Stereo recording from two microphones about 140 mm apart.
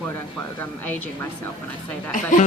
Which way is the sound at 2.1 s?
70° left (ahead or behind).